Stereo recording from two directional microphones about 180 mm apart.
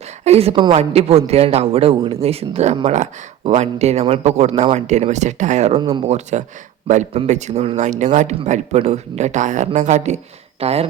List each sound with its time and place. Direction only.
0.3 s speech: 35° right (ahead or behind)